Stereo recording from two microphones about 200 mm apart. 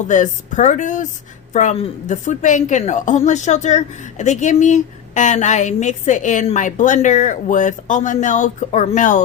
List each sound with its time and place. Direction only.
0.1 s a woman's voice: 40° left (ahead or behind)